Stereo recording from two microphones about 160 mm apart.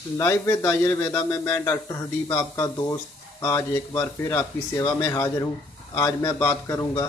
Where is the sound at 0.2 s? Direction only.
15° left (ahead or behind).